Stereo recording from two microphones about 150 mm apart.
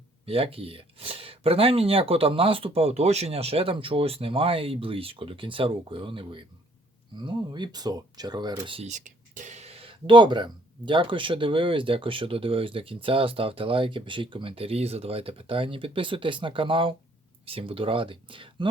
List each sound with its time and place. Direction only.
0.3 s speech: 40° right (ahead or behind)
8.5 s speech: 40° right (ahead or behind)
8.9 s speech: 55° right (ahead or behind); by 18.7 s 35° right (ahead or behind)